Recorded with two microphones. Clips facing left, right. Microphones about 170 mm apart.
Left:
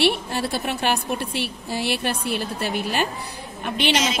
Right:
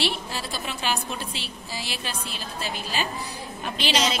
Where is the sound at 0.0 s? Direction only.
60° left (ahead or behind).